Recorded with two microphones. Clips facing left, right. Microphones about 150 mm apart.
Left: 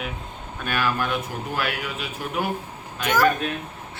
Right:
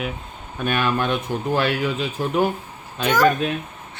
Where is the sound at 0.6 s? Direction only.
20° right (ahead or behind).